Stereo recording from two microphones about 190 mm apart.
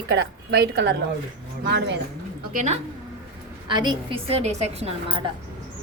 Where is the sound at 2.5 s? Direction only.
35° right (ahead or behind).